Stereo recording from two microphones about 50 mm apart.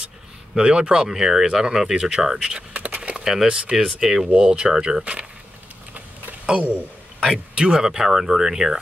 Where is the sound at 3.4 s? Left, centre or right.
Centre.